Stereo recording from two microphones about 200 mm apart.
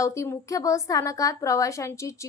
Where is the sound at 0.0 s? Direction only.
15° left (ahead or behind).